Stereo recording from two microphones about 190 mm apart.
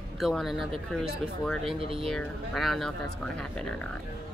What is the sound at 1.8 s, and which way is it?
Speech, 30° right (ahead or behind).